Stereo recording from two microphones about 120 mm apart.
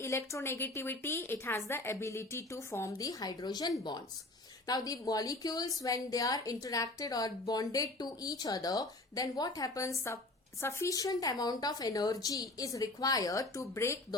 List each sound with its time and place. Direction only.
0.0 s a woman's voice: 25° left (ahead or behind)